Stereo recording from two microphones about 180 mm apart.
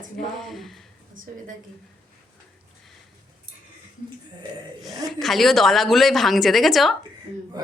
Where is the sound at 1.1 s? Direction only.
50° right (ahead or behind).